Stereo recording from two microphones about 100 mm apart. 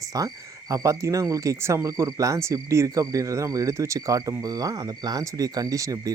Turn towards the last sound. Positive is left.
turn(degrees=-35)  # may be behind; listen again after turning